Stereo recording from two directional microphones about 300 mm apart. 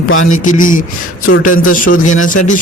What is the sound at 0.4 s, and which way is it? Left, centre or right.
A man's voice, left.